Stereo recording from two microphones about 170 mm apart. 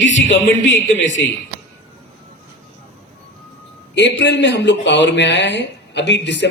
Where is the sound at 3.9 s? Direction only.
90° left.